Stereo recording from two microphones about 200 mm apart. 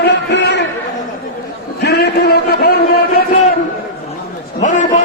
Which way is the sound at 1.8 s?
55° left (ahead or behind).